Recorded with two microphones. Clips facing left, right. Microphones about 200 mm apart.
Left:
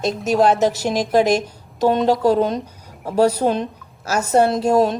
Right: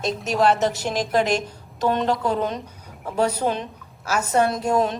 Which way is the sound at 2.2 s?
40° left (ahead or behind).